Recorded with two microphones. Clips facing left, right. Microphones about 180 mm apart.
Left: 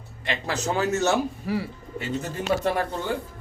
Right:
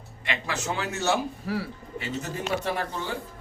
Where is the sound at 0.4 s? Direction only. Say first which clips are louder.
Left 7 dB; 40° left (ahead or behind).